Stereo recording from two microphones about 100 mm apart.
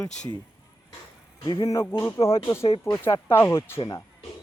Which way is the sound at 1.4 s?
50° left (ahead or behind).